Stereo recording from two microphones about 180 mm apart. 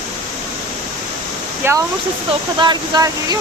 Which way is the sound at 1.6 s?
15° right (ahead or behind).